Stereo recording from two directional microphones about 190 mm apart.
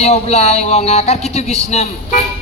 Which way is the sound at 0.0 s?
35° left (ahead or behind).